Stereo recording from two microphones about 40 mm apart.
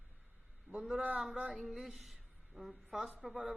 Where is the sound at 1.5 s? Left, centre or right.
Centre.